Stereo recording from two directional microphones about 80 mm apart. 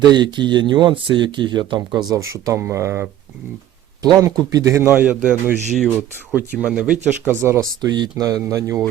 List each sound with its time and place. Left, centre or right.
0.1 s speech: right
2.1 s speech: right
4.0 s speech: right
4.9 s speech: centre
7.1 s speech: right
7.8 s speech: right
8.2 s speech: right